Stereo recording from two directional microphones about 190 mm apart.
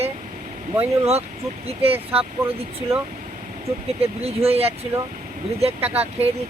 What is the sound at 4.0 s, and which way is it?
Speech, 30° right (ahead or behind).